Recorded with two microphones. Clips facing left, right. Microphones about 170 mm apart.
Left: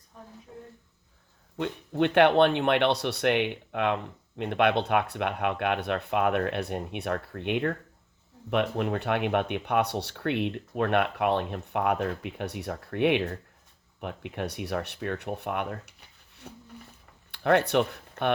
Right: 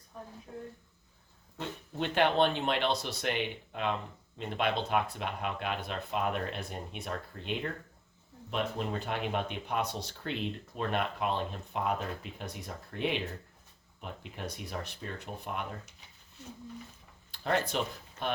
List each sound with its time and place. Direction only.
1.5 s speech: 60° left (ahead or behind)